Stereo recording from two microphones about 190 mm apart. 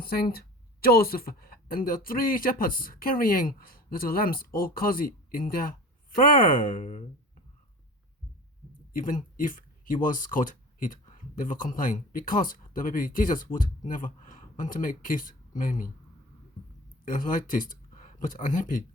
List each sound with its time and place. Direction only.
0.0 s speech: 55° left (ahead or behind)
8.9 s speech: 45° left (ahead or behind)
17.1 s speech: 45° left (ahead or behind)